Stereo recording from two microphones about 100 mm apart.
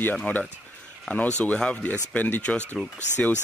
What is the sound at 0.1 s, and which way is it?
Speech, 10° left (ahead or behind).